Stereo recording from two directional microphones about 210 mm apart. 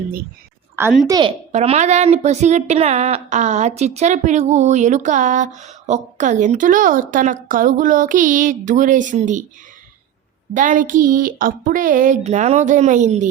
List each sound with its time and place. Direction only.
0.8 s a woman's voice: 10° right (ahead or behind)
1.5 s speech: 30° right (ahead or behind)
10.5 s speech: 40° right (ahead or behind)